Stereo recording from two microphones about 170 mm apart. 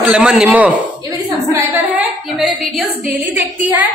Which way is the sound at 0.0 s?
5° right (ahead or behind).